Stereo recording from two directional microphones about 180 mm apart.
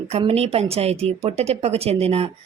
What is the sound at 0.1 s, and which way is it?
A woman's voice, 35° right (ahead or behind).